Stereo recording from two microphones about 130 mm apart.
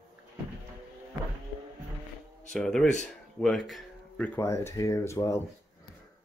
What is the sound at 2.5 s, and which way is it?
Speech, 5° left (ahead or behind).